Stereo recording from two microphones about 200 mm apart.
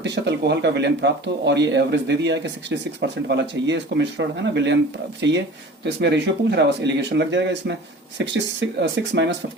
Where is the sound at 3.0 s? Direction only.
60° right (ahead or behind).